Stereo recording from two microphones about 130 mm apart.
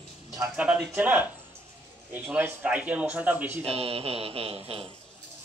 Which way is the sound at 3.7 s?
45° right (ahead or behind).